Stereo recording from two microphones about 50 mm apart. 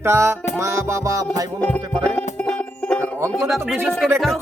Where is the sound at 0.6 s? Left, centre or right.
Right.